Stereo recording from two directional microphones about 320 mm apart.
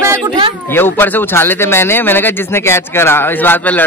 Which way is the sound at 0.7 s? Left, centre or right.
Centre.